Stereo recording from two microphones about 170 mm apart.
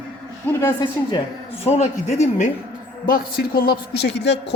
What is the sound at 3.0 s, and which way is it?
Speech, 60° left (ahead or behind).